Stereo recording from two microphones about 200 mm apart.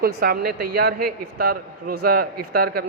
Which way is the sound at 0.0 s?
50° right (ahead or behind).